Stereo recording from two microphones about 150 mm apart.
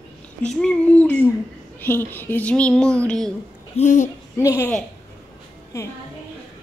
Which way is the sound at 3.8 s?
55° left (ahead or behind).